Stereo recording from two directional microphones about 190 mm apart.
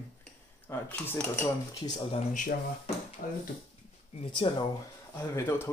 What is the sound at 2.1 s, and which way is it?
Speech, 40° left (ahead or behind).